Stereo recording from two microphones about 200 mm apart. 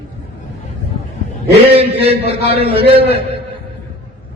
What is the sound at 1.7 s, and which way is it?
Speech, 30° right (ahead or behind).